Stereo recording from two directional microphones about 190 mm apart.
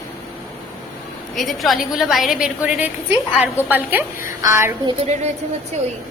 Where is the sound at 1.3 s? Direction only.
Centre (ahead or behind); by 4.9 s 15° right (ahead or behind).